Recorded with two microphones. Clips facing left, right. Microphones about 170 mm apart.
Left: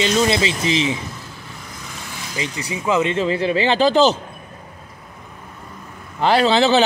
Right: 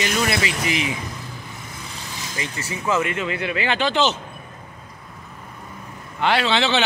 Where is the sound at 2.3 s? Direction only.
20° left (ahead or behind); by 4.2 s 35° left (ahead or behind).